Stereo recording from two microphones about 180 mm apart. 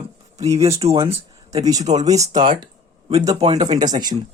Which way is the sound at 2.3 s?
25° right (ahead or behind).